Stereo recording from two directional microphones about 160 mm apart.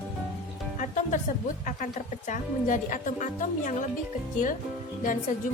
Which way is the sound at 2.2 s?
55° left (ahead or behind).